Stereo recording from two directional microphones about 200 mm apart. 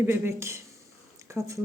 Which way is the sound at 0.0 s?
10° right (ahead or behind).